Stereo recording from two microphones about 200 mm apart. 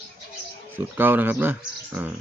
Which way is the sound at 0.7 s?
10° right (ahead or behind).